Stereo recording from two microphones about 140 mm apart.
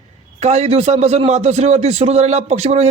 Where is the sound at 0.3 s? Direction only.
55° right (ahead or behind).